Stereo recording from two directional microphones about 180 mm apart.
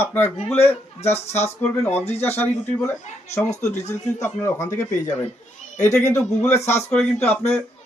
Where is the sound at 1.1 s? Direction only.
35° left (ahead or behind).